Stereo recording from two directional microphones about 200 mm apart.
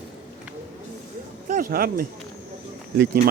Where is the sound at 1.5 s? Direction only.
45° right (ahead or behind).